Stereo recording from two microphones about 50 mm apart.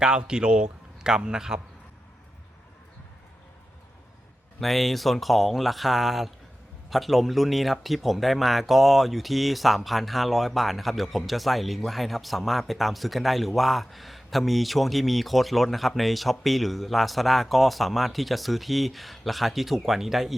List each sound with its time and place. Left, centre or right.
0.0 s speech: centre
4.6 s speech: centre